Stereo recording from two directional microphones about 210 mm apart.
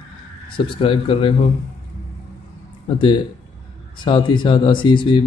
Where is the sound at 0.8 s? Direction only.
25° left (ahead or behind).